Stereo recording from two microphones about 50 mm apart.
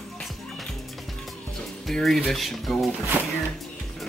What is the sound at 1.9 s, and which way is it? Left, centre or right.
Speech, centre.